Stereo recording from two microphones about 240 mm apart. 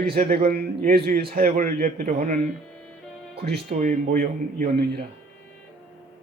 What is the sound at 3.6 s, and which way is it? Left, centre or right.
A man's voice, right.